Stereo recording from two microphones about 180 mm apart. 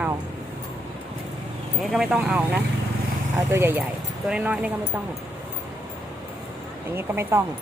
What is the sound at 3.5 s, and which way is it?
Speech, 15° right (ahead or behind).